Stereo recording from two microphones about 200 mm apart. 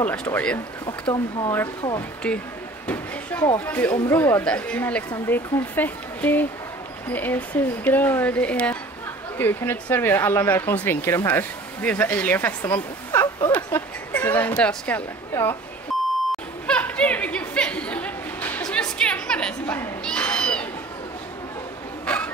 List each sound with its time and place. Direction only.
0.0 s speech: 5° left (ahead or behind)
0.8 s speech: 25° left (ahead or behind)
2.0 s speech: 5° left (ahead or behind)
16.6 s chatter: 5° left (ahead or behind)
22.0 s a sound: 5° left (ahead or behind)